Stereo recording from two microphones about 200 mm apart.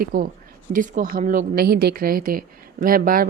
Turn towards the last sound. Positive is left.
turn(degrees=-45)  # may be behind; listen again after turning